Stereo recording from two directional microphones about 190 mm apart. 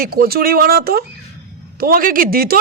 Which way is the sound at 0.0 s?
55° right (ahead or behind).